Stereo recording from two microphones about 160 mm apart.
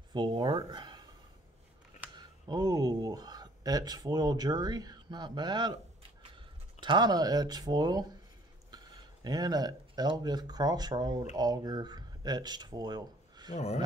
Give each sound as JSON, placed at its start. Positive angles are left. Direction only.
{"t": 0.1, "sound": "speech", "side_deg": -30}
{"t": 2.1, "sound": "speech", "side_deg": -25}
{"t": 6.8, "sound": "speech", "side_deg": -30}
{"t": 13.5, "sound": "speech", "side_deg": 45}